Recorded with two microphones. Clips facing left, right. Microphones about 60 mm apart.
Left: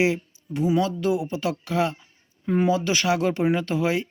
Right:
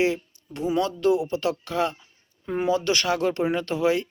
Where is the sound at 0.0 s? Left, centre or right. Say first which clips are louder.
Left 1 dB; centre.